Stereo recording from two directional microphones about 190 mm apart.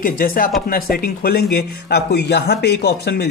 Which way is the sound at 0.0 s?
50° left (ahead or behind).